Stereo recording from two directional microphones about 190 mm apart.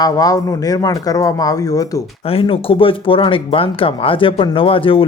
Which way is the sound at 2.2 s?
30° left (ahead or behind).